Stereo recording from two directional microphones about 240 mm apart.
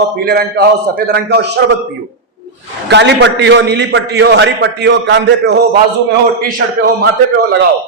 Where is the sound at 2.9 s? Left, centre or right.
Right.